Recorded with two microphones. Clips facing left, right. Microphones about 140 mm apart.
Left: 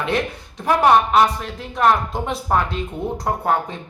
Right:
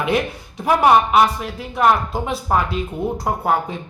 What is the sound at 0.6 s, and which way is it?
Speech, 10° right (ahead or behind).